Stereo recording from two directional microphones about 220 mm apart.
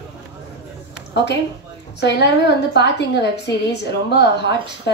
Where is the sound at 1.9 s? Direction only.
50° left (ahead or behind).